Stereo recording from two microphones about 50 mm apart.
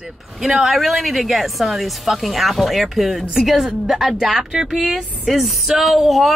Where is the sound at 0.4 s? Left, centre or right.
Centre.